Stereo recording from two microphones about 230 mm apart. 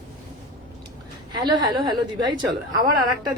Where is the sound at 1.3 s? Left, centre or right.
Centre.